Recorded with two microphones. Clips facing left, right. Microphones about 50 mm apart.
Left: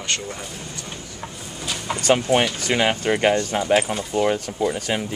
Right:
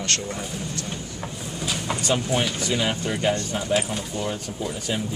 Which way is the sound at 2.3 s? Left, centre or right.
Left.